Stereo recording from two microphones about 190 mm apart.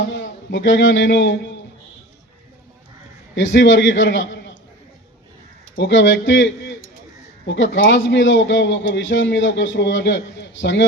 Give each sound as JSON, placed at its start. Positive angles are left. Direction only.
{"t": 0.0, "sound": "a man's voice", "side_deg": 70}
{"t": 3.3, "sound": "a man's voice", "side_deg": 75}
{"t": 5.7, "sound": "a man's voice", "side_deg": 75}